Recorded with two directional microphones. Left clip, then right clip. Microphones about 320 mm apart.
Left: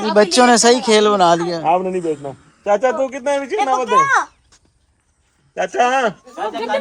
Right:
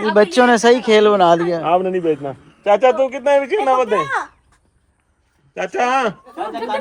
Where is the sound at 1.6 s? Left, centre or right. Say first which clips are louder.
Right 1 dB; right.